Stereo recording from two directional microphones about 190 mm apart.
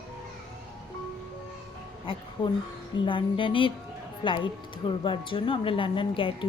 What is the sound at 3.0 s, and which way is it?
Speech, 25° left (ahead or behind).